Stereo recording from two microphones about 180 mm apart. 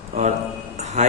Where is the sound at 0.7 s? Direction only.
40° right (ahead or behind).